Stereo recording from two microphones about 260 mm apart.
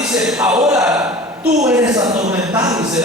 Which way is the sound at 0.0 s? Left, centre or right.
Centre.